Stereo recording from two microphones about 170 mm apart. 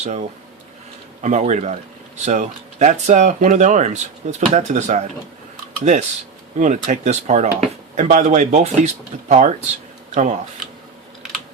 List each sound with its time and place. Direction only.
0.0 s speech: 40° right (ahead or behind)
6.6 s speech: 45° right (ahead or behind)